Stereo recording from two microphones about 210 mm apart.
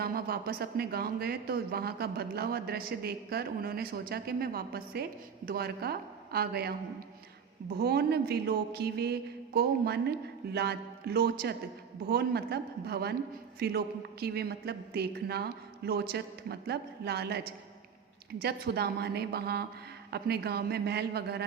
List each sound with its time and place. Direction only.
0.0 s speech: 45° right (ahead or behind)
7.8 s speech: 50° right (ahead or behind)